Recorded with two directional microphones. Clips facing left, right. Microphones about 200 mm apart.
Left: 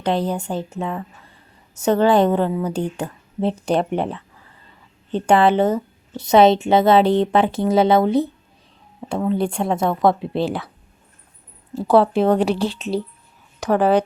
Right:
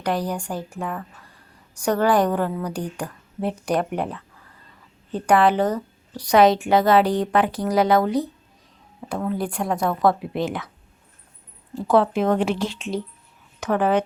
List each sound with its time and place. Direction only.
0.0 s a woman's voice: 25° left (ahead or behind)
11.7 s speech: 35° left (ahead or behind)